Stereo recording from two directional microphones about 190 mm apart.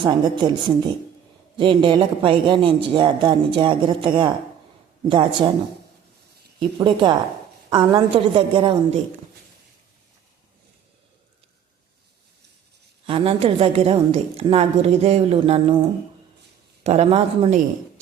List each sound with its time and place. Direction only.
0.0 s a man's voice: 25° right (ahead or behind)
6.6 s a man's voice: 25° right (ahead or behind)
13.1 s a woman's voice: 30° right (ahead or behind)
16.8 s a woman's voice: 35° right (ahead or behind)